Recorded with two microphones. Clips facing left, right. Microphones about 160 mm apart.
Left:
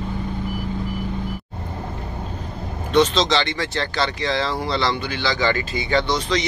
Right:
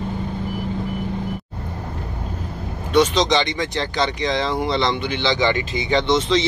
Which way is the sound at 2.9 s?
15° right (ahead or behind).